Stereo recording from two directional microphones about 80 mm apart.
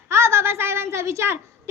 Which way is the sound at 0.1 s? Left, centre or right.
Right.